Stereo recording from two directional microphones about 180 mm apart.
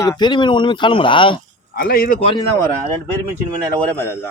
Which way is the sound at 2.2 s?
30° left (ahead or behind).